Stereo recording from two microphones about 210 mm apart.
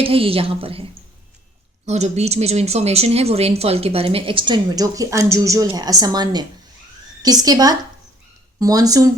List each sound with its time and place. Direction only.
0.0 s speech: 25° right (ahead or behind)
1.9 s speech: 30° right (ahead or behind)